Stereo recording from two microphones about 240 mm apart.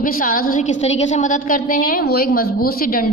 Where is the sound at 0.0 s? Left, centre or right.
Left.